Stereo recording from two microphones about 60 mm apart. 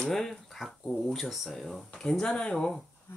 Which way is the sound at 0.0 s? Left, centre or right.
Centre.